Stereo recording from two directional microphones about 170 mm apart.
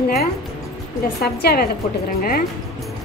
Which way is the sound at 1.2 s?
65° left (ahead or behind).